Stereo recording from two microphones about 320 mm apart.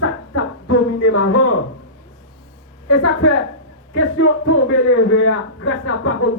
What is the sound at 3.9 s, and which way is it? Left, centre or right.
A man's voice, left.